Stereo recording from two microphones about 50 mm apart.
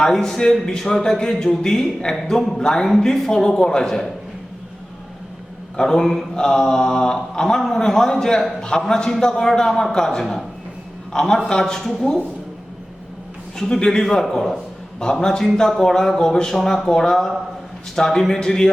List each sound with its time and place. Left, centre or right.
0.0 s mantra: centre
5.7 s mantra: centre
11.1 s a man's voice: centre
11.4 s mantra: centre
13.6 s mantra: centre